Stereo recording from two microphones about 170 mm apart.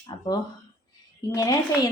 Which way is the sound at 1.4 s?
20° left (ahead or behind).